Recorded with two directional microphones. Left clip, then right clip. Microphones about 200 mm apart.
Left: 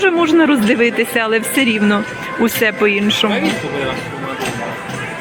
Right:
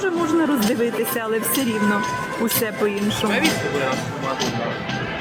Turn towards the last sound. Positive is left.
turn(degrees=15)  # may be behind; listen again after turning